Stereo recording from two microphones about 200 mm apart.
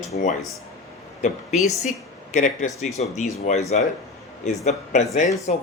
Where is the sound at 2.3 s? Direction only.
35° left (ahead or behind).